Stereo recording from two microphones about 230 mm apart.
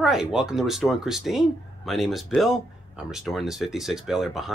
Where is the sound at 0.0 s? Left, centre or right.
Centre.